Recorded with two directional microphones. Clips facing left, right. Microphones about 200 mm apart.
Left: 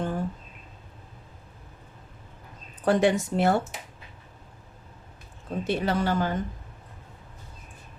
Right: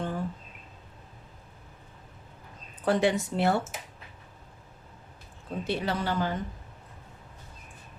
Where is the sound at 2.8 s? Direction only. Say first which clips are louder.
Left 3 dB; 50° left (ahead or behind).